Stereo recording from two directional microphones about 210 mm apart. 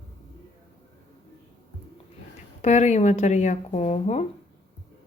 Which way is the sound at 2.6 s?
35° left (ahead or behind).